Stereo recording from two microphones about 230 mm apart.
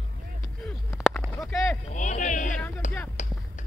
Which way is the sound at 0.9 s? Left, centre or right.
Centre.